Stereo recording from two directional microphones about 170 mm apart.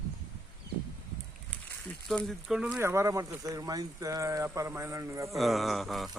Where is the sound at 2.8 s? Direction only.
15° right (ahead or behind).